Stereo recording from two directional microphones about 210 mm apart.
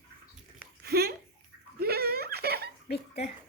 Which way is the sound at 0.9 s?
50° right (ahead or behind).